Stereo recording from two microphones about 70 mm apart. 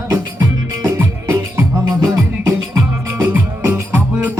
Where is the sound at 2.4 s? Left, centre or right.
Right.